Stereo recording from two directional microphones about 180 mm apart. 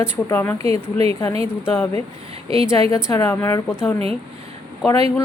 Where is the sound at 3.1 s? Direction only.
15° left (ahead or behind).